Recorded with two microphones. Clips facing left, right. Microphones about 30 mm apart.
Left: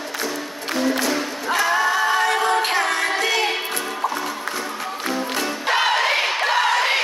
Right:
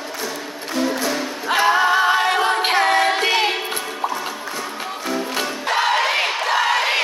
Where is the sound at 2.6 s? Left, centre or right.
Right.